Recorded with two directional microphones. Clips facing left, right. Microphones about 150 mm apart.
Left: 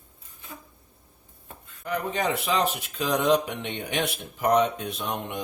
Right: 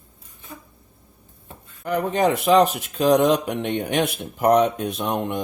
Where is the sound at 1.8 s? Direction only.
50° right (ahead or behind).